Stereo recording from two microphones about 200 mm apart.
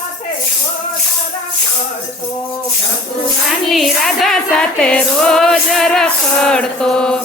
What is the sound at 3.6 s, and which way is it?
Music, centre (ahead or behind).